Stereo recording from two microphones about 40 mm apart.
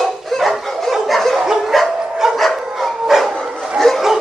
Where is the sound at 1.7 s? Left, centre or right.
Centre.